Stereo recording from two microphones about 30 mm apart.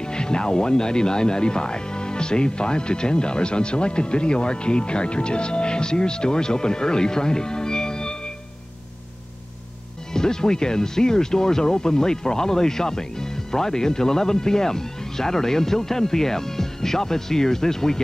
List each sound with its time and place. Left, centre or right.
0.0 s speech: left
10.1 s speech: left